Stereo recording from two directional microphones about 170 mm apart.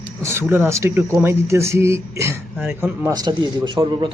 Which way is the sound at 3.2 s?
25° right (ahead or behind).